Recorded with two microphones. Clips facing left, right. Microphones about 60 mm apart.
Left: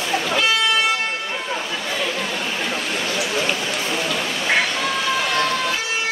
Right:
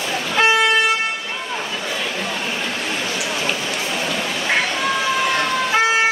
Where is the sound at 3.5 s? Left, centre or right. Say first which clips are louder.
Even; centre.